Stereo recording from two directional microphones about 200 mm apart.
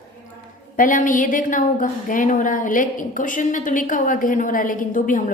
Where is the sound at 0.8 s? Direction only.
40° left (ahead or behind).